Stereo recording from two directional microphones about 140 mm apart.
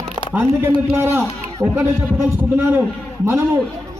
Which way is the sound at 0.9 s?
15° right (ahead or behind).